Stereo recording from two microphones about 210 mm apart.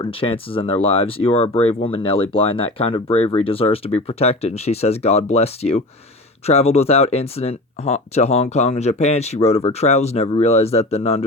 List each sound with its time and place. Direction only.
0.0 s speech: 25° left (ahead or behind)